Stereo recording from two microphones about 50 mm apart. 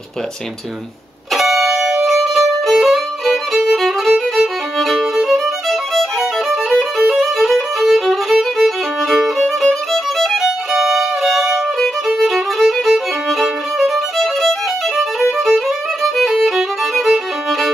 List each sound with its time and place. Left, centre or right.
1.3 s music: centre
2.0 s violin: centre
15.3 s music: centre